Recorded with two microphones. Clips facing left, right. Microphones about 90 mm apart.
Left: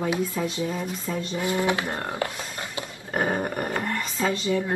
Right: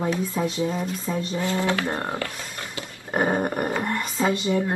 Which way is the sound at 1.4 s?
15° left (ahead or behind).